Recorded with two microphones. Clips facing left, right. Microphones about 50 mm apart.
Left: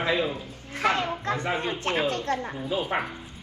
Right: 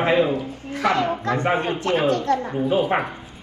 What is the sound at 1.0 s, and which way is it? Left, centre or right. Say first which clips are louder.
A woman's voice: right 6 dB; right.